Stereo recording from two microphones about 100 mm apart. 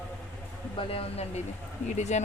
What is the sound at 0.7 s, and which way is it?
Speech, 65° left (ahead or behind).